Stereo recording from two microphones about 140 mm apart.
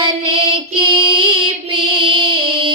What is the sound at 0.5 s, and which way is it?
Female singing, 35° right (ahead or behind).